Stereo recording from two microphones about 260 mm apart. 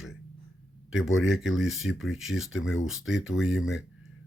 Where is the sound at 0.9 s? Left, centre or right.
Centre.